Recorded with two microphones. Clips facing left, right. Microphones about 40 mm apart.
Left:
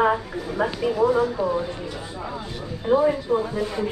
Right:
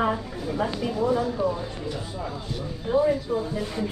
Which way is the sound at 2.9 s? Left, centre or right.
Left.